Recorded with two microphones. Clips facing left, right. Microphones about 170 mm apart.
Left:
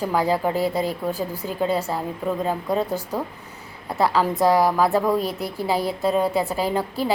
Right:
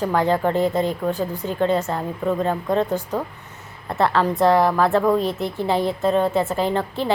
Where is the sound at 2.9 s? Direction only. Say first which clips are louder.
Right 3 dB; 20° right (ahead or behind).